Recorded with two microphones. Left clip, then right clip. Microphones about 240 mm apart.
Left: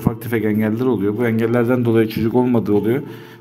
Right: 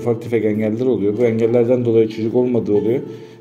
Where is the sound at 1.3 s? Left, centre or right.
Left.